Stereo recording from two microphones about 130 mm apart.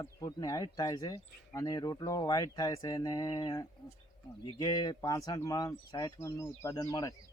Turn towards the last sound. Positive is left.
turn(degrees=25)  # may be behind; listen again after turning